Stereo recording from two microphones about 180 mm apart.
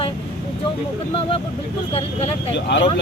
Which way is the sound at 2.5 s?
80° left.